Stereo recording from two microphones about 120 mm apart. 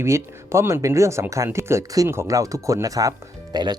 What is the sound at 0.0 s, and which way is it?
Speech, 20° right (ahead or behind).